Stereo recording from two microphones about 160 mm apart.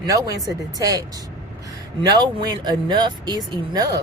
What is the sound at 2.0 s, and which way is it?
Speech, 25° right (ahead or behind).